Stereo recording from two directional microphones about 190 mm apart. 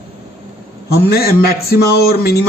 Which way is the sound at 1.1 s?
55° left (ahead or behind).